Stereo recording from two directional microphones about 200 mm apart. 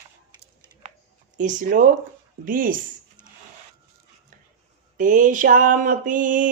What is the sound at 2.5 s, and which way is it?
Speech, 45° right (ahead or behind).